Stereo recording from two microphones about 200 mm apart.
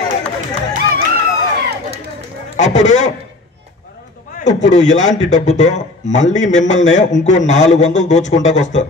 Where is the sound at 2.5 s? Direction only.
35° left (ahead or behind).